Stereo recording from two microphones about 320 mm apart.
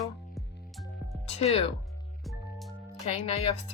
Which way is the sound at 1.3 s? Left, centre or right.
Centre.